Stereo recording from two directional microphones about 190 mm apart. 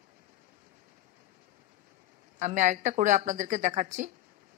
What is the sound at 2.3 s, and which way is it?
A woman's voice, 40° right (ahead or behind).